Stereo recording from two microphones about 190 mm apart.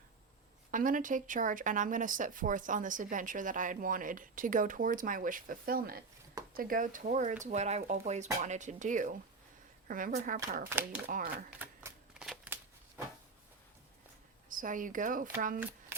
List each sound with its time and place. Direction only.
0.7 s speech: 45° right (ahead or behind)
10.7 s speech: 10° right (ahead or behind)
11.0 s speech: 45° right (ahead or behind)
11.6 s typewriter: 10° right (ahead or behind)
12.5 s a sound: 10° right (ahead or behind)
14.5 s speech: 45° right (ahead or behind)